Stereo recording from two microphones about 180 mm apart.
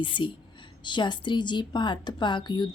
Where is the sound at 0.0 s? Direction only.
25° left (ahead or behind).